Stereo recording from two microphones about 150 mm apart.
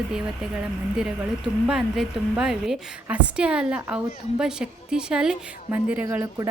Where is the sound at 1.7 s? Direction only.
5° right (ahead or behind).